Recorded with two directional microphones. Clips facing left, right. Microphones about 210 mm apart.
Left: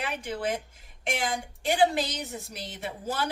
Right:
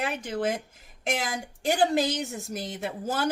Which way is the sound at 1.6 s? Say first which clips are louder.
Right 1 dB; 45° right (ahead or behind).